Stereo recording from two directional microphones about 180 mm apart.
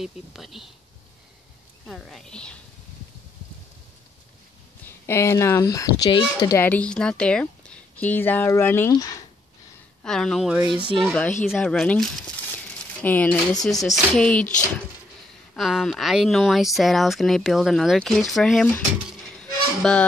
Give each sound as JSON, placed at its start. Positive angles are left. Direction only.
{"t": 0.0, "sound": "speech", "side_deg": 0}
{"t": 1.9, "sound": "speech", "side_deg": 0}
{"t": 4.8, "sound": "speech", "side_deg": 15}
{"t": 6.6, "sound": "speech", "side_deg": 10}
{"t": 10.0, "sound": "speech", "side_deg": 0}
{"t": 15.5, "sound": "speech", "side_deg": 0}